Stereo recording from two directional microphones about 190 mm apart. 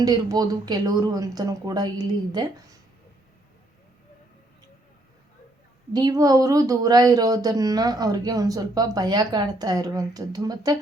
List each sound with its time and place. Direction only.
0.0 s speech: 20° right (ahead or behind)
5.9 s speech: 20° right (ahead or behind)